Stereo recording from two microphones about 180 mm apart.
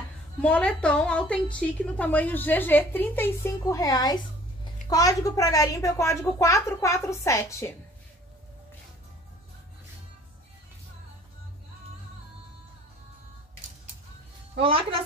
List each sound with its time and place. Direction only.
0.4 s a woman's voice: 5° left (ahead or behind)
14.6 s a woman's voice: 30° right (ahead or behind)